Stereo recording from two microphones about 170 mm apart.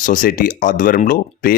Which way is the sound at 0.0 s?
50° left (ahead or behind).